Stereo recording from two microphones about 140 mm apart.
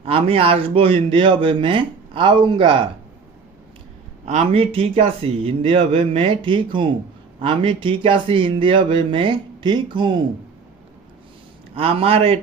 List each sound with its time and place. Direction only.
0.0 s speech: 40° right (ahead or behind)
4.5 s speech: 40° right (ahead or behind)
11.7 s a man's voice: 40° right (ahead or behind)